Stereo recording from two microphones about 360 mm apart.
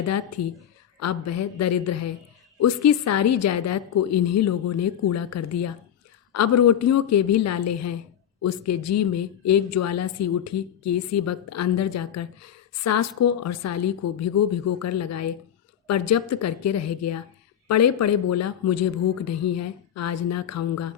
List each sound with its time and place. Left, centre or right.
0.9 s speech: left